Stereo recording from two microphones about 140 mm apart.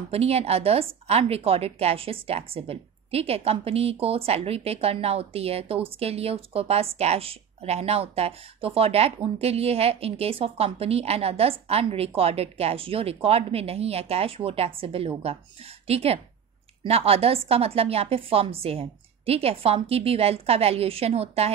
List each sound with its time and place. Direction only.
0.1 s a woman's voice: 45° right (ahead or behind)